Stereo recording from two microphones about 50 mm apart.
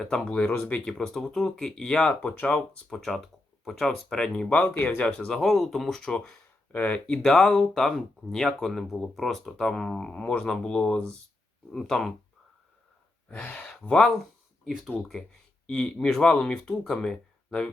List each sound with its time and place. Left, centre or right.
0.0 s speech: centre
0.3 s speech: left
0.9 s speech: centre
2.4 s speech: left
2.9 s speech: centre
4.5 s speech: left
5.3 s speech: centre
6.7 s speech: left
7.2 s speech: centre
10.1 s speech: centre
13.4 s speech: left
14.6 s speech: centre
15.6 s speech: centre